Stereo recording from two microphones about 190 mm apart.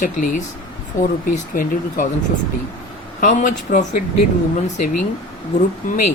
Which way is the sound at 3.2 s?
40° left (ahead or behind).